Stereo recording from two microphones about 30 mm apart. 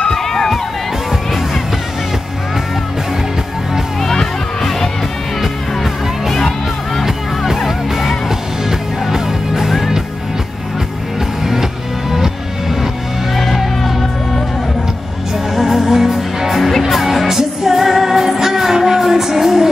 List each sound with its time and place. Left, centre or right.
0.1 s music: centre
4.0 s music: centre
7.5 s music: centre
9.1 s music: centre
13.4 s music: centre
15.5 s music: centre